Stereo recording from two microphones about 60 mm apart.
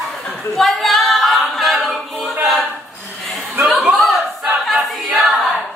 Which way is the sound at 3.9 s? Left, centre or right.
Right.